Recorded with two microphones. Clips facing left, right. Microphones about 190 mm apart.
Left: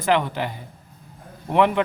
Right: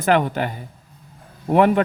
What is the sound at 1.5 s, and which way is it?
Speech, 45° right (ahead or behind).